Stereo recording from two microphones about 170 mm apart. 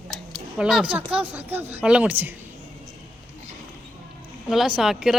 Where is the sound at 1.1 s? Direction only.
10° right (ahead or behind).